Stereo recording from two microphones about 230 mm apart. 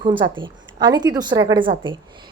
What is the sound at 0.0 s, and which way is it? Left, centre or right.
A woman's voice, right.